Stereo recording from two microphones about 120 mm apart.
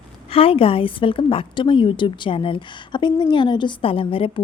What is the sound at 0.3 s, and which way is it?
A woman's voice, 50° left (ahead or behind).